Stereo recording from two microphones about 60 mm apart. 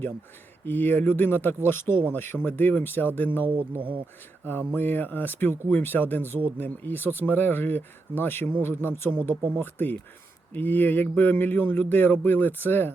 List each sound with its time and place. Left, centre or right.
0.6 s speech: left